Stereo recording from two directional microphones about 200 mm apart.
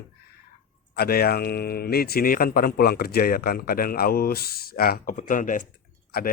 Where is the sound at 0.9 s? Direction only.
50° left (ahead or behind).